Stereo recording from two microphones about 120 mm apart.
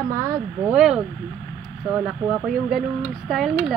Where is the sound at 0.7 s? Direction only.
10° right (ahead or behind).